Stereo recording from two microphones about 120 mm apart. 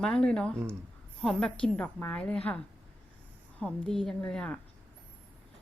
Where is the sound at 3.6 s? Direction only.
5° left (ahead or behind).